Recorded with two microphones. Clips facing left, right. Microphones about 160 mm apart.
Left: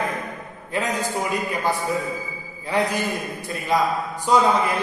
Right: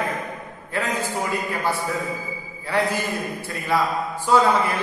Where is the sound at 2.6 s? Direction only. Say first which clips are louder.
Left 1 dB; 15° left (ahead or behind).